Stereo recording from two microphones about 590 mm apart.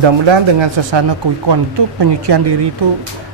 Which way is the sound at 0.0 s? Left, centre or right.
Right.